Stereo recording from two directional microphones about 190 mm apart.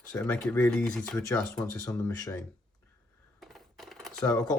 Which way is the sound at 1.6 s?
15° left (ahead or behind).